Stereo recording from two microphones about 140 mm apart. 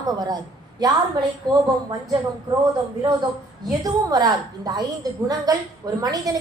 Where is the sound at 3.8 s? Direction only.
25° right (ahead or behind).